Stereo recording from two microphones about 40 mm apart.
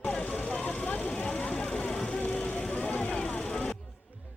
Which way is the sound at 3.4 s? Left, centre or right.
Centre.